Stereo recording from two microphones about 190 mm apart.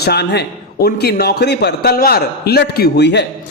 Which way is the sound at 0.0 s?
60° left (ahead or behind).